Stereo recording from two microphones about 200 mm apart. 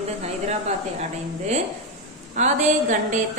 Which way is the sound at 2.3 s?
35° right (ahead or behind).